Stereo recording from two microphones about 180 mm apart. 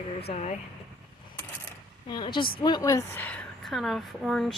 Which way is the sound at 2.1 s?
25° left (ahead or behind).